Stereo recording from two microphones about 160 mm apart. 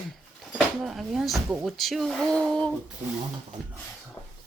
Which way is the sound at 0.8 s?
Centre (ahead or behind).